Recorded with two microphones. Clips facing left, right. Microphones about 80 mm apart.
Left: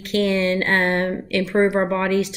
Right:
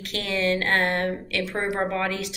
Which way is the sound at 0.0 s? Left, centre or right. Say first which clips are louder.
Left 7 dB; left.